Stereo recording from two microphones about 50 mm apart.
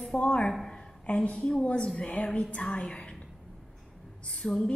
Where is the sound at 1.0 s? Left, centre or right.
Left.